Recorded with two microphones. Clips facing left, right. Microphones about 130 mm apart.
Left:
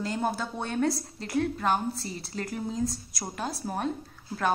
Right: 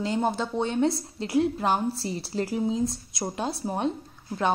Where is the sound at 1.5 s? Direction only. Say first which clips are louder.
Right 2 dB; 30° right (ahead or behind).